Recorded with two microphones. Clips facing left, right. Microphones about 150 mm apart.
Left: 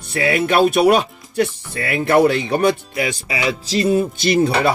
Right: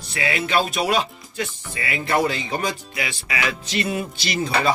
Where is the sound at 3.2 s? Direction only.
30° left (ahead or behind).